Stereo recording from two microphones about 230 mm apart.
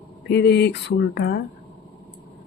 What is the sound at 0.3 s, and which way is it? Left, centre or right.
Speech, left.